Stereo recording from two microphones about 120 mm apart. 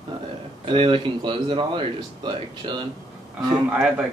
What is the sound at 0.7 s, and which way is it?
Speech, 45° right (ahead or behind).